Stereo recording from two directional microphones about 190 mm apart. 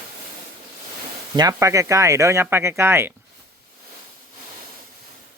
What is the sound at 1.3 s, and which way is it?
Speech, 20° right (ahead or behind).